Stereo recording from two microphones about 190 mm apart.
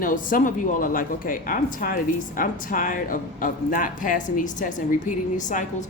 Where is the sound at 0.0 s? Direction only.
45° left (ahead or behind).